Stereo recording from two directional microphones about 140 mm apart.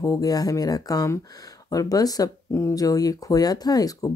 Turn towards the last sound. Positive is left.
turn(degrees=25)  # may be behind; listen again after turning